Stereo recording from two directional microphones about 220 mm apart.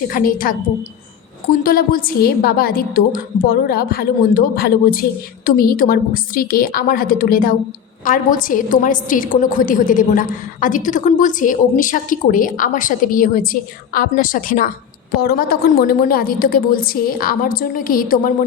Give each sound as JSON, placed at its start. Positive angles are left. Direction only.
{"t": 0.1, "sound": "a woman's voice", "side_deg": 40}